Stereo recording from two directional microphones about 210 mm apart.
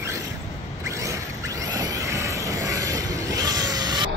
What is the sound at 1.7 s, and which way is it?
Vehicle, 15° right (ahead or behind).